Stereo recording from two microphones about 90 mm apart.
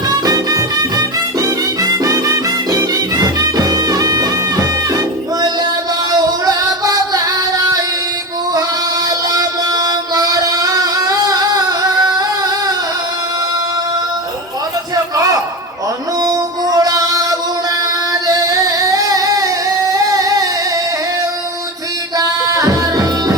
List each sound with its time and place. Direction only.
0.1 s music: 40° right (ahead or behind)
9.0 s music: 45° right (ahead or behind)
14.9 s a sound: 40° right (ahead or behind)
16.2 s music: 40° right (ahead or behind)
18.1 s singing: 40° right (ahead or behind)
22.2 s music: 40° right (ahead or behind)